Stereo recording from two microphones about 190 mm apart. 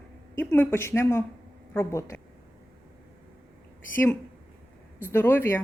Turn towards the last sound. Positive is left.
turn(degrees=10)  # may be behind; listen again after turning